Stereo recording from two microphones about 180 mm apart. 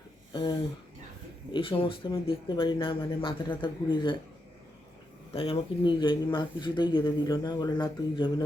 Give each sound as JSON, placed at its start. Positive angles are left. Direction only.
{"t": 1.5, "sound": "speech", "side_deg": 30}
{"t": 5.3, "sound": "speech", "side_deg": 30}